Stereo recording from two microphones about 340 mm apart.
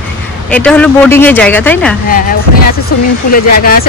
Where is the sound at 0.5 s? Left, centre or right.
Centre.